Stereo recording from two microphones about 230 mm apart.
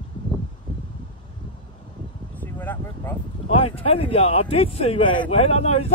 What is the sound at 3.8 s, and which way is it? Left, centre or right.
A man's voice, left.